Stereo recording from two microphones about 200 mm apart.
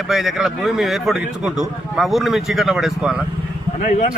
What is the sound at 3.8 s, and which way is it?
Speech, 40° left (ahead or behind).